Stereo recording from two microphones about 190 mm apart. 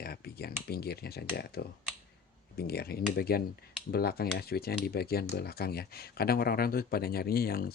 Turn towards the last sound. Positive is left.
turn(degrees=50)  # may be behind; listen again after turning